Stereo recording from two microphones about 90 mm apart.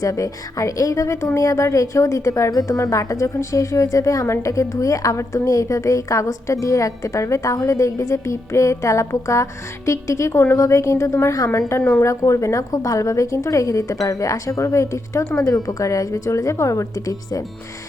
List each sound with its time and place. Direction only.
0.0 s a woman's voice: 40° left (ahead or behind)